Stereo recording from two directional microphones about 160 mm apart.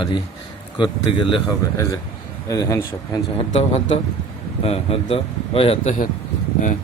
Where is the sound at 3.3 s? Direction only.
40° left (ahead or behind).